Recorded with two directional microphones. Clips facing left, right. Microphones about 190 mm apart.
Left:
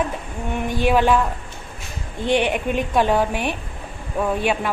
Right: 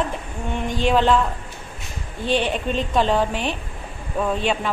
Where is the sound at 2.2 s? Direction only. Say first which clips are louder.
Left 2 dB; 15° left (ahead or behind).